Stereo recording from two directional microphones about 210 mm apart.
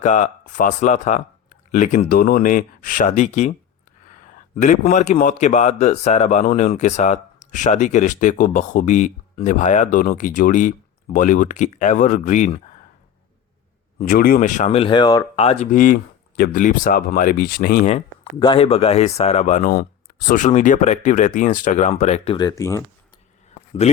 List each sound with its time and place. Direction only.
0.0 s a man's voice: 35° left (ahead or behind)
14.0 s a man's voice: 45° left (ahead or behind)
17.8 s a man's voice: 25° left (ahead or behind)
23.8 s a man's voice: 35° left (ahead or behind)